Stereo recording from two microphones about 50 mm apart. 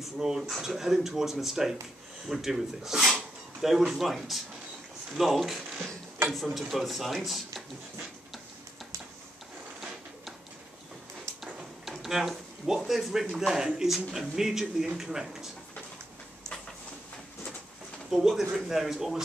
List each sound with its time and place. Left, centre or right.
0.0 s speech: centre
3.1 s a sound: centre
5.1 s speech: centre
9.8 s a sound: centre
12.0 s speech: centre
18.1 s speech: centre